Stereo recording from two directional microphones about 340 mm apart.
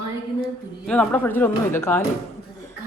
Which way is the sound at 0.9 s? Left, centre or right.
Centre.